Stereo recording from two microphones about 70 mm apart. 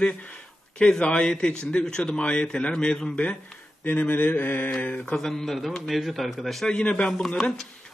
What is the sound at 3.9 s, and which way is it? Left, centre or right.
Mantra, left.